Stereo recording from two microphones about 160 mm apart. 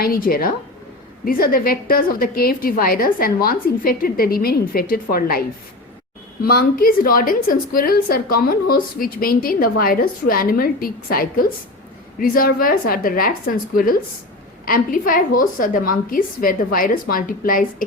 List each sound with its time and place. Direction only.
0.0 s a woman's voice: 65° left (ahead or behind)